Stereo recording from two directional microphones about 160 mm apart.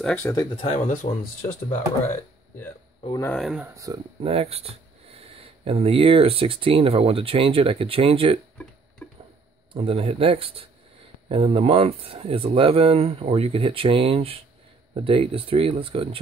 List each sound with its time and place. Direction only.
0.1 s speech: 20° left (ahead or behind)
0.6 s speech: 40° left (ahead or behind)
3.3 s speech: centre (ahead or behind)
3.7 s speech: 20° right (ahead or behind)
4.2 s speech: 35° right (ahead or behind)
9.0 s a sound: 10° left (ahead or behind)
9.8 s speech: 35° right (ahead or behind)